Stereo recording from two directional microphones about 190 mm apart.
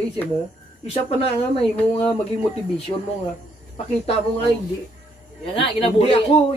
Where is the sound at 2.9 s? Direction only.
25° left (ahead or behind).